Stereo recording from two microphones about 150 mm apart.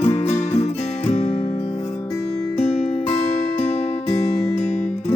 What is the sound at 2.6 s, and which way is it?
Music, 50° left (ahead or behind).